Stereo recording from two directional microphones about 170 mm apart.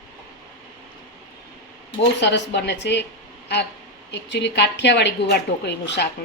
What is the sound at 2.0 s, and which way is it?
A woman's voice, 90° left.